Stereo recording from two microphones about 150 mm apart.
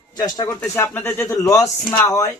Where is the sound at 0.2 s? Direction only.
25° left (ahead or behind).